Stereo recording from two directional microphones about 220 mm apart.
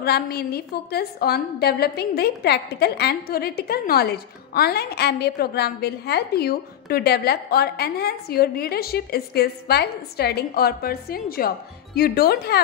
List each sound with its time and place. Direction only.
0.0 s a woman's voice: 45° left (ahead or behind)